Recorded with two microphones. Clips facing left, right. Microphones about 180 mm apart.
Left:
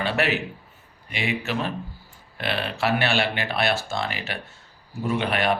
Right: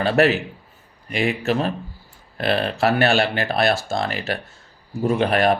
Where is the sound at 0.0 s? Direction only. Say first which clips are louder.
Right 8 dB; 40° right (ahead or behind).